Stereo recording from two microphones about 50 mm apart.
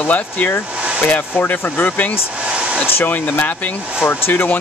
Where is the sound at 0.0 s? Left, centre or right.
Left.